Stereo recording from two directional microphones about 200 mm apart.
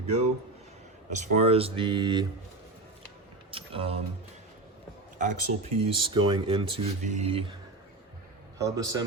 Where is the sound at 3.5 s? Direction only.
25° right (ahead or behind).